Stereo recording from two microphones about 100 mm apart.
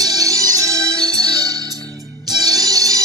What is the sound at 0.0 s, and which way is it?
Music, 40° right (ahead or behind).